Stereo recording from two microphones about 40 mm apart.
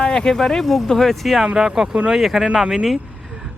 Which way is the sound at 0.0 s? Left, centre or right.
Centre.